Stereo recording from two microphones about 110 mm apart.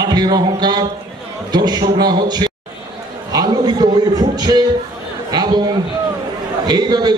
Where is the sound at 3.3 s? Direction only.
35° right (ahead or behind).